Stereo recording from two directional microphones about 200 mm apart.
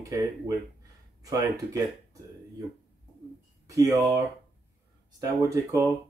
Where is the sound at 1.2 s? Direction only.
15° right (ahead or behind).